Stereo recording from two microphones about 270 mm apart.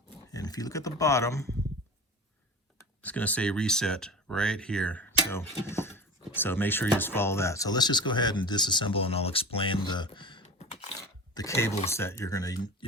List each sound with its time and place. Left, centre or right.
0.1 s speech: centre
2.7 s speech: centre